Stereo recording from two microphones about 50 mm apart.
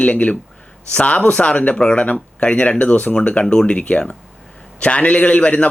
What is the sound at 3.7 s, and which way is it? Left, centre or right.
Speech, left.